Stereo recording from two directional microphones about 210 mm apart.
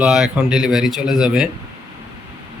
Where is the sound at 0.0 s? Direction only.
5° right (ahead or behind).